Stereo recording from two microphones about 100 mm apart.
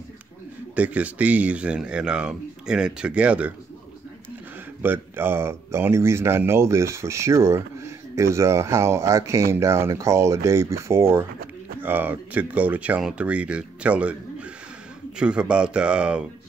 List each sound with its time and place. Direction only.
0.7 s speech: 15° right (ahead or behind)
4.8 s speech: 20° right (ahead or behind)
15.1 s speech: 10° right (ahead or behind)